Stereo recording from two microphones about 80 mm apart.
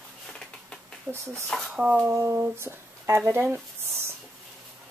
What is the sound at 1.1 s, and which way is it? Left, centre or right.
Speech, right.